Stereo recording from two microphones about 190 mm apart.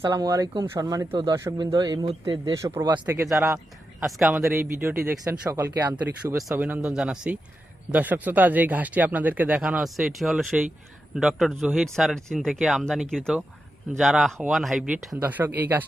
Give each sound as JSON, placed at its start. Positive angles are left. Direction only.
{"t": 0.0, "sound": "speech", "side_deg": -20}
{"t": 4.0, "sound": "speech", "side_deg": 0}
{"t": 4.5, "sound": "speech", "side_deg": -10}